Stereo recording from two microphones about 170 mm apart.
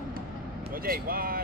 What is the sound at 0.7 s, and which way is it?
Speech, 60° right (ahead or behind).